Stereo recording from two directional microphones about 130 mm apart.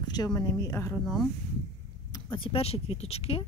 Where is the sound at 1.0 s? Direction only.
Centre (ahead or behind).